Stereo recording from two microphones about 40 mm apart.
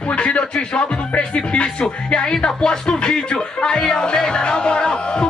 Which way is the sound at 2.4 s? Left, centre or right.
Left.